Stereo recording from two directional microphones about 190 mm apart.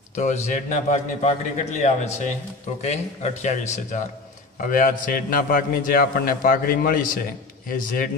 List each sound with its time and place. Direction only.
0.1 s a man's voice: 40° left (ahead or behind)